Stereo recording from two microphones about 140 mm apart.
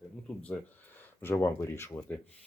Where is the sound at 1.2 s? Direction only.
15° left (ahead or behind).